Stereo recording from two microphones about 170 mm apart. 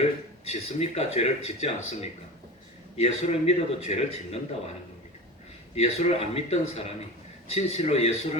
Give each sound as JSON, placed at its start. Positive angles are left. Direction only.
{"t": 0.4, "sound": "speech", "side_deg": 40}
{"t": 3.0, "sound": "speech", "side_deg": 40}
{"t": 5.7, "sound": "speech", "side_deg": 40}